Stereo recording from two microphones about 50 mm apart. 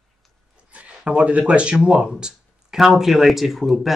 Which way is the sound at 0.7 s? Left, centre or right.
Right.